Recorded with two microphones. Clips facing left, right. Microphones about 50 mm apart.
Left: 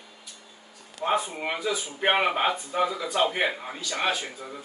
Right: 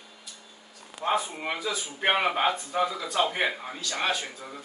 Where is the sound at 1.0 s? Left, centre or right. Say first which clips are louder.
Left 1 dB; centre.